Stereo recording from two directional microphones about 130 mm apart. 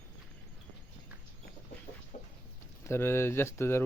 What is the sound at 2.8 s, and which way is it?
Speech, 20° left (ahead or behind).